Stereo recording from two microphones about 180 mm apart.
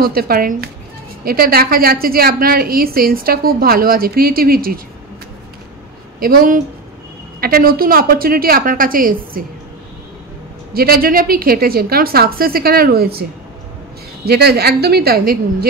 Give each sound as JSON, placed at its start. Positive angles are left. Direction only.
{"t": 0.0, "sound": "a woman's voice", "side_deg": -55}
{"t": 6.1, "sound": "a woman's voice", "side_deg": -50}
{"t": 10.7, "sound": "a woman's voice", "side_deg": -55}
{"t": 14.2, "sound": "a woman's voice", "side_deg": -60}